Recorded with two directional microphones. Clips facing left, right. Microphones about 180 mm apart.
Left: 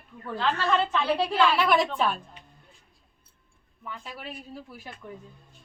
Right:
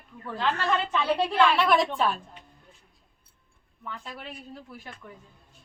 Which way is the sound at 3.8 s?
5° left (ahead or behind).